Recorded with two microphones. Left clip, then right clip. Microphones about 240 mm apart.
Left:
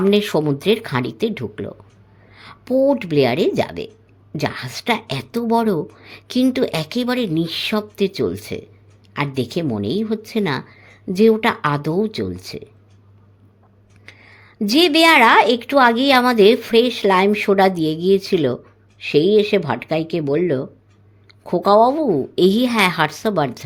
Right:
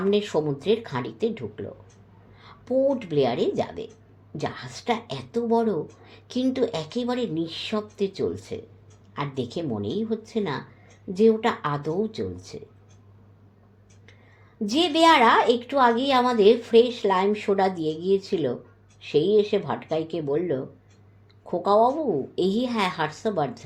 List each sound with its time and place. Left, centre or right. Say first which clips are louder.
0.1 s speech: left 6 dB; left
14.6 s speech: left 6 dB; left